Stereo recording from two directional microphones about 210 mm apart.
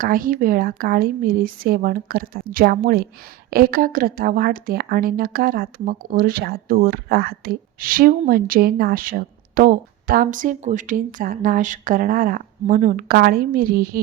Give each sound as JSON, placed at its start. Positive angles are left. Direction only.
{"t": 0.0, "sound": "a woman's voice", "side_deg": -40}